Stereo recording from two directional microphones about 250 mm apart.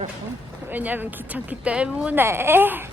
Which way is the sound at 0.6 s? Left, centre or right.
Centre.